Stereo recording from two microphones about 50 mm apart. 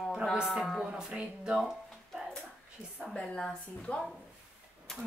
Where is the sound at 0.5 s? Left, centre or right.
Centre.